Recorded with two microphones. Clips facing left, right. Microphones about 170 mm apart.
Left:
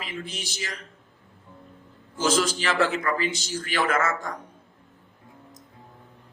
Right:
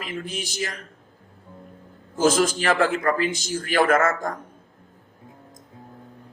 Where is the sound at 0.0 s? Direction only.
45° right (ahead or behind).